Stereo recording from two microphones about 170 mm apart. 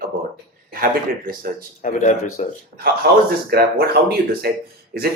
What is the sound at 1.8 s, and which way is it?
Speech, 50° left (ahead or behind).